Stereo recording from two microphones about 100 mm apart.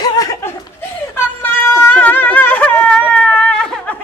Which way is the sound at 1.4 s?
20° left (ahead or behind).